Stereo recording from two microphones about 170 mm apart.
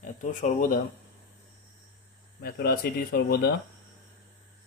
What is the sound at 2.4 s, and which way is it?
Speech, 65° left (ahead or behind).